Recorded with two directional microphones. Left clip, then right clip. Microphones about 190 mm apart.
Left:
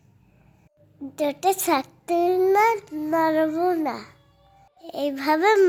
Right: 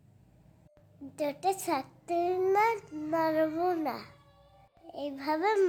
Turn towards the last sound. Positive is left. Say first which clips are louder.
# left 10 dB
turn(degrees=25)  # may be behind; listen again after turning